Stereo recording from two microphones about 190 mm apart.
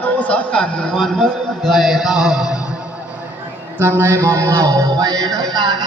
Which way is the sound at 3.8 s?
10° right (ahead or behind).